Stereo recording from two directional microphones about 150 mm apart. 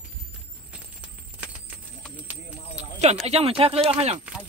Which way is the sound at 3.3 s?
40° right (ahead or behind).